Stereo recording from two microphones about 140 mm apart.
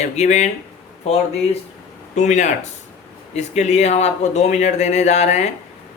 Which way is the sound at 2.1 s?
55° left (ahead or behind).